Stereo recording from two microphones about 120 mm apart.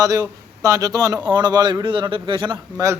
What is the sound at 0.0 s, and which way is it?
A man's voice, 25° right (ahead or behind).